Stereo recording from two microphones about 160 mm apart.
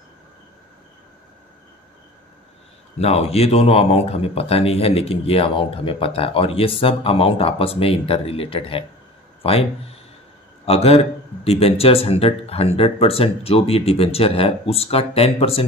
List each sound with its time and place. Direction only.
3.0 s speech: 40° left (ahead or behind)